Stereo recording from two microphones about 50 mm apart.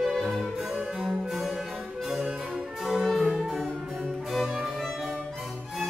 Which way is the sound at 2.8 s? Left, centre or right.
Centre.